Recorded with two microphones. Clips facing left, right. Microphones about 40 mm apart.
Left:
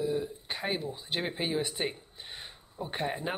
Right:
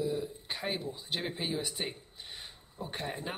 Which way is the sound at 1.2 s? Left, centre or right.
Left.